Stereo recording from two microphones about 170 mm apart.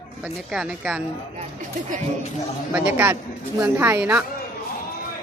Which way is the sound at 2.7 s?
10° right (ahead or behind).